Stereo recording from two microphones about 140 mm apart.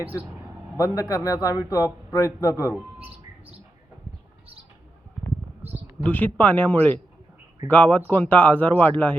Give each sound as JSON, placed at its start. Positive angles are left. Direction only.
{"t": 0.0, "sound": "speech", "side_deg": -15}
{"t": 0.8, "sound": "a man's voice", "side_deg": 25}
{"t": 6.0, "sound": "speech", "side_deg": 10}